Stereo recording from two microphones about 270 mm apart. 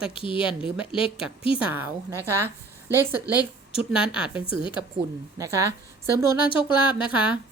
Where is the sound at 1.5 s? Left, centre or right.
Centre.